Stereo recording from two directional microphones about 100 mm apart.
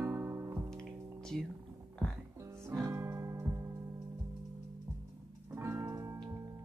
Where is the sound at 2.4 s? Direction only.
25° right (ahead or behind).